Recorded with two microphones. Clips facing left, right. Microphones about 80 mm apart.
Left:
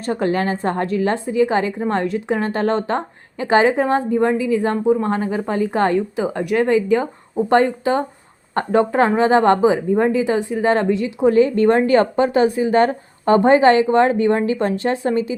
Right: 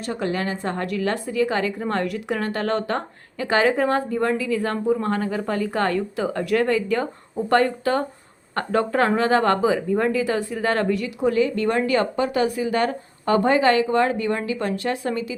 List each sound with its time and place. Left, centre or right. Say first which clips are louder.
0.0 s a woman's voice: left 6 dB; left